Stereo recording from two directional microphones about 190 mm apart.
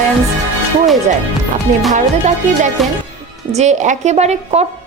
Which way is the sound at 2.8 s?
Centre (ahead or behind).